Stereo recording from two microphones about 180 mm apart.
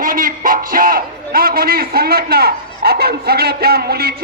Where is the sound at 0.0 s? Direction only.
50° right (ahead or behind).